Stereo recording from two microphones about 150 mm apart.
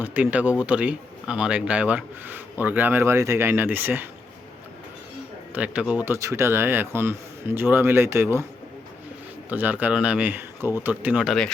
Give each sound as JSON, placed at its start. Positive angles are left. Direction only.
{"t": 0.0, "sound": "speech", "side_deg": -10}
{"t": 5.5, "sound": "speech", "side_deg": -10}
{"t": 6.1, "sound": "speech", "side_deg": -20}
{"t": 9.5, "sound": "speech", "side_deg": -10}